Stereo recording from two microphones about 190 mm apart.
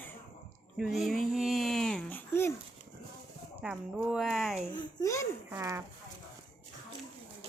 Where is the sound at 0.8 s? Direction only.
Centre (ahead or behind).